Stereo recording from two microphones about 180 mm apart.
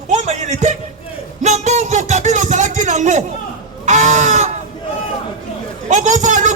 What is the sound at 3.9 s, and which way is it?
Speech, 40° right (ahead or behind).